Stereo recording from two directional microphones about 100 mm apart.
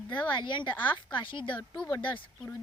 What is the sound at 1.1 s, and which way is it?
Speech, 55° left (ahead or behind).